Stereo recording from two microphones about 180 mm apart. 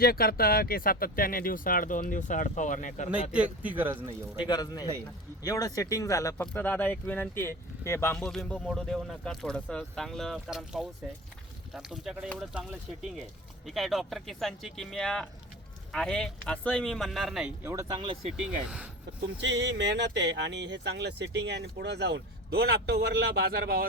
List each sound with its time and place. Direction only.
0.0 s speech: 60° left (ahead or behind)
3.1 s speech: 5° right (ahead or behind)
4.4 s speech: 25° left (ahead or behind)
8.3 s speech: centre (ahead or behind)
13.7 s speech: centre (ahead or behind)
17.6 s speech: 15° right (ahead or behind)
19.4 s speech: 85° right; by 23.8 s 55° right (ahead or behind)